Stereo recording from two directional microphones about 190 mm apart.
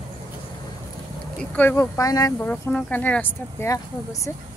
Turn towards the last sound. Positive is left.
turn(degrees=15)  # may be behind; listen again after turning